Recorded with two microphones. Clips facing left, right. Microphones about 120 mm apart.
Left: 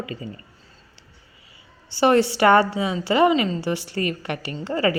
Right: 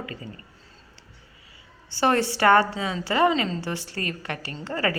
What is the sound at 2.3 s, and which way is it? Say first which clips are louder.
A woman's voice: left 3 dB; 20° left (ahead or behind).